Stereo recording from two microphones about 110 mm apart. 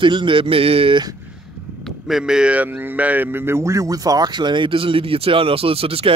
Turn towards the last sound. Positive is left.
turn(degrees=-60)  # may be behind; listen again after turning